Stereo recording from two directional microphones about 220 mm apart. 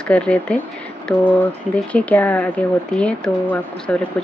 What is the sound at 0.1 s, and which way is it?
Speech, 5° left (ahead or behind).